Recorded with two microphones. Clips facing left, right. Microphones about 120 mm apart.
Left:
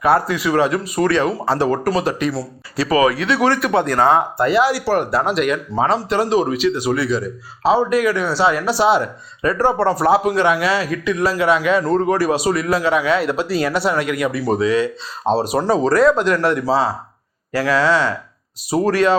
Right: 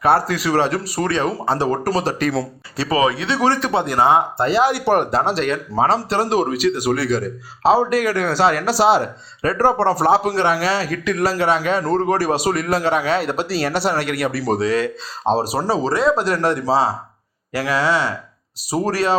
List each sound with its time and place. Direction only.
0.0 s a man's voice: 30° right (ahead or behind)
3.7 s speech: 20° right (ahead or behind)
5.2 s a man's voice: 30° right (ahead or behind)
15.3 s a man's voice: 20° right (ahead or behind)
17.5 s speech: 15° right (ahead or behind)
18.9 s a man's voice: 35° right (ahead or behind)